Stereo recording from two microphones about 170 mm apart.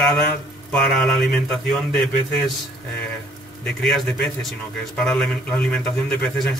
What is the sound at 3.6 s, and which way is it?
Speech, centre (ahead or behind).